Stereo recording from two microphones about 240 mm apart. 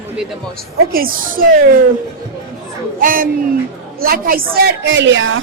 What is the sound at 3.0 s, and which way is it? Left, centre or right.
A woman's voice, right.